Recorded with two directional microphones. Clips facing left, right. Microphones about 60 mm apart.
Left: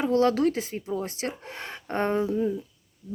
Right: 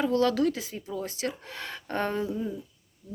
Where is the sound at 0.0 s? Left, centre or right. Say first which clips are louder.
Left 2 dB; left.